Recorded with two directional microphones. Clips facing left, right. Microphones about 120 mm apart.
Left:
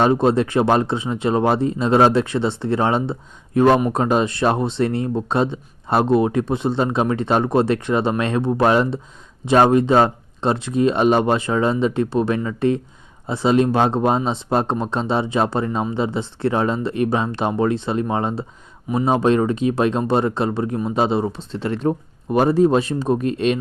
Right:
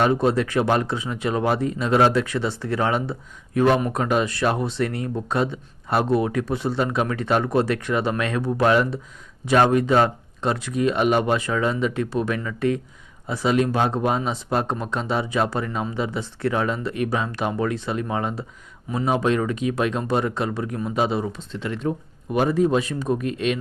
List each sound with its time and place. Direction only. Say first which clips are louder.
0.0 s speech: left 3 dB; 25° left (ahead or behind)